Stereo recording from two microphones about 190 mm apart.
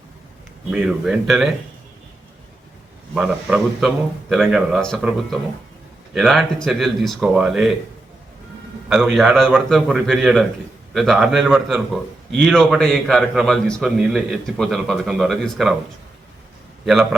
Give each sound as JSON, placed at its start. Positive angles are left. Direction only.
{"t": 0.7, "sound": "a man's voice", "side_deg": -5}
{"t": 3.2, "sound": "a man's voice", "side_deg": -5}
{"t": 8.9, "sound": "a man's voice", "side_deg": 0}
{"t": 16.8, "sound": "a man's voice", "side_deg": 0}